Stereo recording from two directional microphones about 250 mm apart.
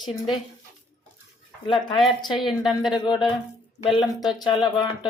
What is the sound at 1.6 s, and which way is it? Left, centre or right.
Speech, centre.